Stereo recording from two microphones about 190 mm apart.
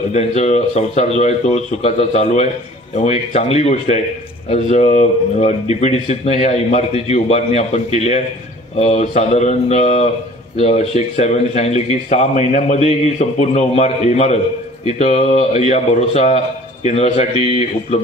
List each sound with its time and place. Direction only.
0.1 s speech: 35° left (ahead or behind)